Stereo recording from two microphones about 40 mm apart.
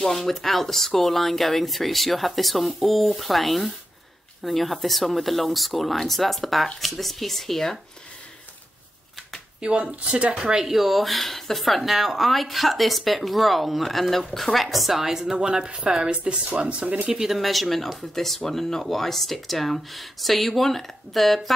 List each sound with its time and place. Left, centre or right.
0.0 s speech: centre
9.6 s speech: right; by 15.3 s centre
15.3 s a woman's voice: right
17.3 s speech: centre